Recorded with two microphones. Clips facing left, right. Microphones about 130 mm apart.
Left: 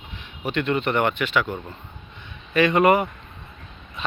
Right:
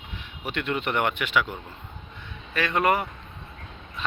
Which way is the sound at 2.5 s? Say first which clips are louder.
Left 6 dB; 5° left (ahead or behind).